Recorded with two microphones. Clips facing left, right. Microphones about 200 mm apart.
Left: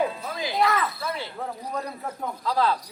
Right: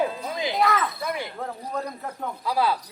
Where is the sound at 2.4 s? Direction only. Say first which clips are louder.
Even; 10° right (ahead or behind).